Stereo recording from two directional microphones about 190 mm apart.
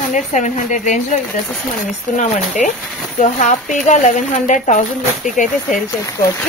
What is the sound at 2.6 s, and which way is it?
Speech, 40° left (ahead or behind).